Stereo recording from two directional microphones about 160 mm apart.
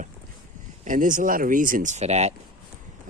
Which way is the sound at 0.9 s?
55° right (ahead or behind).